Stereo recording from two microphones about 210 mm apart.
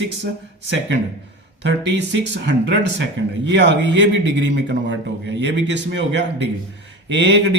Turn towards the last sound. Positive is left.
turn(degrees=-60)  # may be behind; listen again after turning